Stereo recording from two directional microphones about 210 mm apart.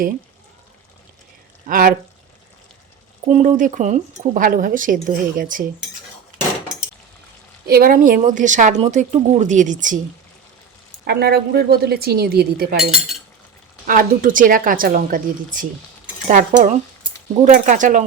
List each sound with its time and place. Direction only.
1.6 s speech: 40° right (ahead or behind)
3.2 s speech: 35° right (ahead or behind)
7.7 s speech: 45° right (ahead or behind)
11.0 s a woman's voice: 50° right (ahead or behind)
12.8 s speech: centre (ahead or behind)
13.8 s speech: 40° right (ahead or behind)